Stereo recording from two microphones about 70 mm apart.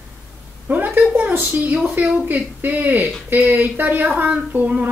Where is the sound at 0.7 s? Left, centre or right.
Right.